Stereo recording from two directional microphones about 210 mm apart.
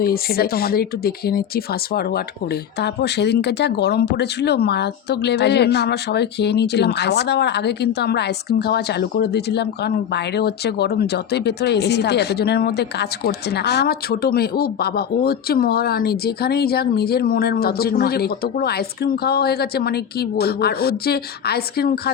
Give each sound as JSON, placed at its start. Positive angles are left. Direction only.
{"t": 0.0, "sound": "speech", "side_deg": 45}